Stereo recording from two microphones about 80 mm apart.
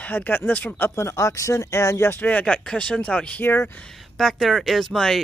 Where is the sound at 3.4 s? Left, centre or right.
Left.